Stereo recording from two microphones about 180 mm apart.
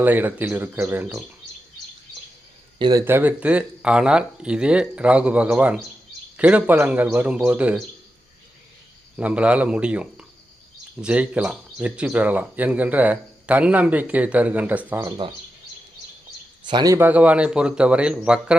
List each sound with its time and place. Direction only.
0.0 s speech: 10° right (ahead or behind)
2.7 s speech: 25° right (ahead or behind)
3.0 s speech: 10° right (ahead or behind)
9.1 s speech: 5° right (ahead or behind)
16.6 s speech: 20° right (ahead or behind); by 18.5 s 5° right (ahead or behind)